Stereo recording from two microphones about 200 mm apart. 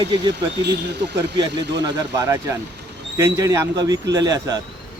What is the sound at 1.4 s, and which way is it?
Speech, 20° right (ahead or behind).